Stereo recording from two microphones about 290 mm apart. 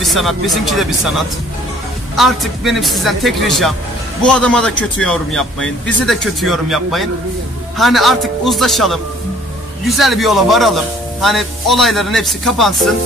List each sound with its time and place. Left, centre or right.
0.0 s speech: centre
2.1 s speech: centre